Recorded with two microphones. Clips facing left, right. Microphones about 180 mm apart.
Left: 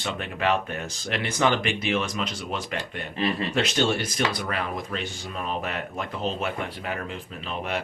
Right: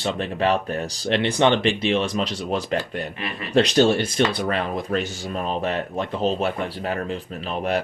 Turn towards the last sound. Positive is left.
turn(degrees=-40)  # may be behind; listen again after turning